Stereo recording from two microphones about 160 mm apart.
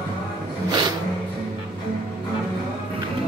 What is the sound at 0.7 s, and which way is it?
Music, 25° right (ahead or behind).